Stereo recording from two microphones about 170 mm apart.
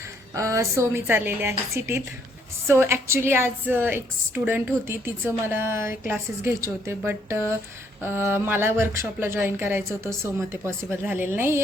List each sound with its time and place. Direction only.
0.3 s speech: 20° right (ahead or behind)